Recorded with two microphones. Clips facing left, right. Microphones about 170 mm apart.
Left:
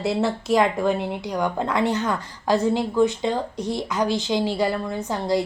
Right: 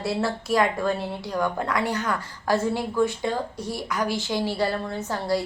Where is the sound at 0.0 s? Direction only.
20° left (ahead or behind).